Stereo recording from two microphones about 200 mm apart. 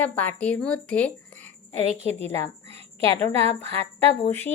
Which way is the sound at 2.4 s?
30° right (ahead or behind).